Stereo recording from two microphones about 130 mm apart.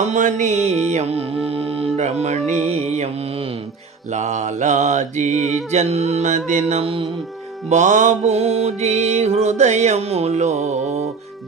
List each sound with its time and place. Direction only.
0.0 s music: 75° right (ahead or behind); by 3.5 s 50° right (ahead or behind)
4.1 s mantra: 65° right (ahead or behind); by 7.1 s 45° right (ahead or behind)
7.7 s mantra: 65° right (ahead or behind)